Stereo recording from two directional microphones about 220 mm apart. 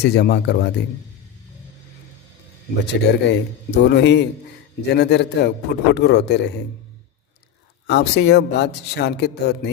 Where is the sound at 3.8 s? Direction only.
50° left (ahead or behind).